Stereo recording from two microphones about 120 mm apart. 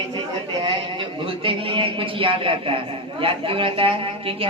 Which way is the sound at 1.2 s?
45° right (ahead or behind).